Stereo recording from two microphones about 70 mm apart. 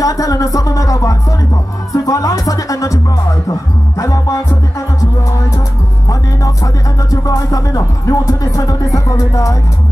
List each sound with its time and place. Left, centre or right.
0.0 s music: left
4.0 s music: left
6.0 s music: left